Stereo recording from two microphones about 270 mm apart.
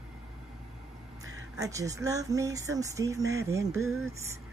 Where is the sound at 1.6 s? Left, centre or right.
Centre.